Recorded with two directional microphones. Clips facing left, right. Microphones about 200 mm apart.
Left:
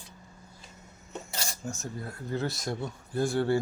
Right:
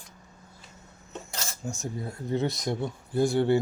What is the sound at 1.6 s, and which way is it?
Speech, 15° right (ahead or behind).